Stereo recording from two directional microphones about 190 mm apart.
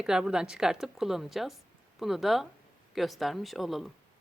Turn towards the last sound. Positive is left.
turn(degrees=0)  # may be behind; listen again after turning